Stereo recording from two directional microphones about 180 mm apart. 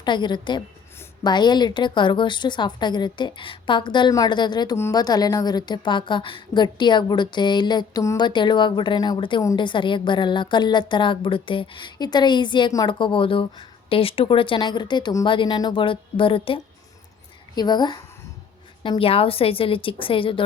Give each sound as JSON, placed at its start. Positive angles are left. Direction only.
{"t": 0.0, "sound": "a woman's voice", "side_deg": 25}